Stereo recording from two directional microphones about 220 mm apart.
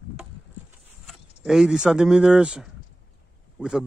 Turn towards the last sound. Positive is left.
turn(degrees=-5)  # may be behind; listen again after turning